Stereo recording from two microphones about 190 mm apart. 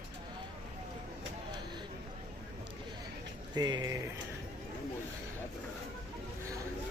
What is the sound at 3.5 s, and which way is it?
Speech, 20° right (ahead or behind).